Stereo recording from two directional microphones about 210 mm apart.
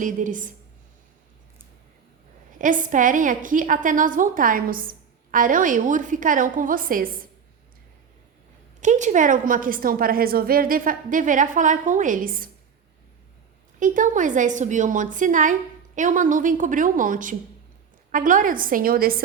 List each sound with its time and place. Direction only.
0.0 s a woman's voice: 40° right (ahead or behind)
2.6 s a woman's voice: 40° right (ahead or behind)
8.8 s a woman's voice: 35° right (ahead or behind)
13.7 s a woman's voice: 40° right (ahead or behind)